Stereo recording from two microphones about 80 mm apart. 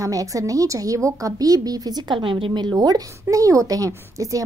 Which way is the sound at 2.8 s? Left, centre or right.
Right.